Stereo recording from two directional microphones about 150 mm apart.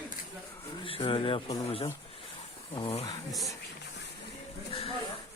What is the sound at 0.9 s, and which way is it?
Speech, 35° left (ahead or behind).